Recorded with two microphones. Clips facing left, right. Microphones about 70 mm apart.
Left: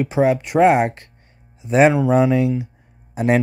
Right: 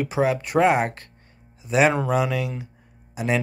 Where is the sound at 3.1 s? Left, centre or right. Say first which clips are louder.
Left 6 dB; left.